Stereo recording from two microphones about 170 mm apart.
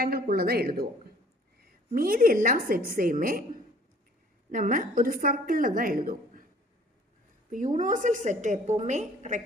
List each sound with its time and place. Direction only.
0.0 s speech: 60° right (ahead or behind)
2.0 s a woman's voice: 55° right (ahead or behind)
4.5 s a woman's voice: 50° right (ahead or behind)
7.5 s a woman's voice: 45° right (ahead or behind)